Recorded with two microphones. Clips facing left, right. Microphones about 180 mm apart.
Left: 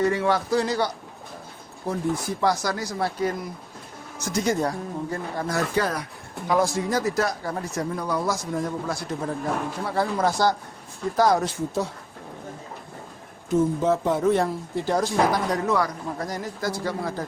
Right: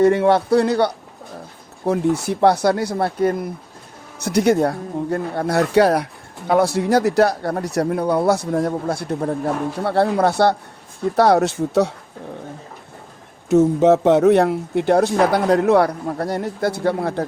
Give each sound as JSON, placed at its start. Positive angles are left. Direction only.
{"t": 0.0, "sound": "speech", "side_deg": -55}
{"t": 4.2, "sound": "speech", "side_deg": -65}
{"t": 13.5, "sound": "speech", "side_deg": -75}